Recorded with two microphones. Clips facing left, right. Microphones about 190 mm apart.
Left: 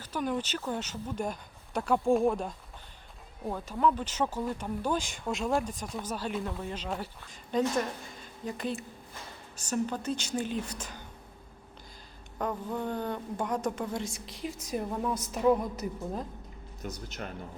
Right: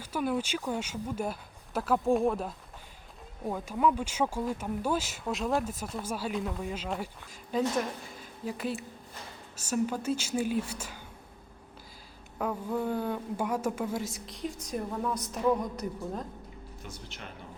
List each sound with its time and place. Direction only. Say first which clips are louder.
0.0 s a woman's voice: right 1 dB; 10° right (ahead or behind)
12.4 s a woman's voice: right 2 dB; 5° right (ahead or behind)
16.8 s speech: left 8 dB; 40° left (ahead or behind)